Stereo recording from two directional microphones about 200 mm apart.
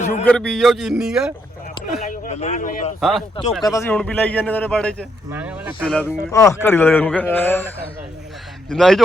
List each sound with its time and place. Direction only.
0.3 s a man's voice: 5° left (ahead or behind)
2.0 s speech: 40° left (ahead or behind)
3.0 s a man's voice: centre (ahead or behind)
3.6 s a man's voice: 15° left (ahead or behind)
5.3 s speech: 10° right (ahead or behind)
5.9 s a man's voice: 5° left (ahead or behind)
6.3 s a man's voice: 15° left (ahead or behind)
8.7 s a man's voice: centre (ahead or behind)